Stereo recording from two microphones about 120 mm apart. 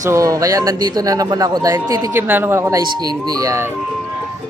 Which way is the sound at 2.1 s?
15° right (ahead or behind).